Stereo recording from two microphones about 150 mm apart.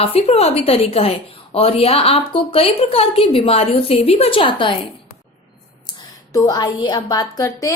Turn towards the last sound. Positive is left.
turn(degrees=25)  # may be behind; listen again after turning